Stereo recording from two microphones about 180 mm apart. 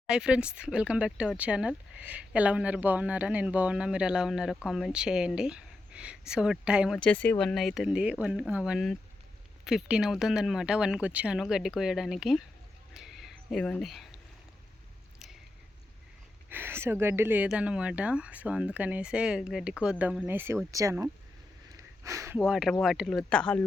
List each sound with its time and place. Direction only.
0.1 s speech: 5° right (ahead or behind)
12.9 s a sound: centre (ahead or behind)
16.5 s speech: 10° right (ahead or behind)
21.7 s sniff: 15° right (ahead or behind)
22.4 s speech: 5° right (ahead or behind)